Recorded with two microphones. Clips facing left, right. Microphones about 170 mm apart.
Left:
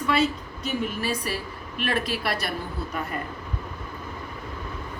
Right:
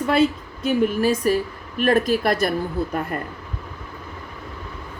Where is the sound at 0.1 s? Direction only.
50° right (ahead or behind).